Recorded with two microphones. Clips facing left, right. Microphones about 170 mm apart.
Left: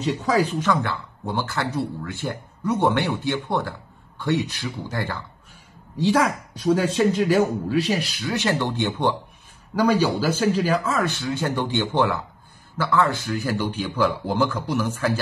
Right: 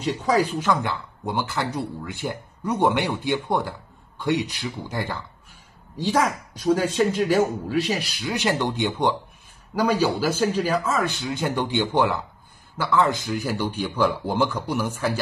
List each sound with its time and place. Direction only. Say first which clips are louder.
0.5 s speech: left 1 dB; 10° right (ahead or behind)
6.6 s speech: left 1 dB; 10° right (ahead or behind)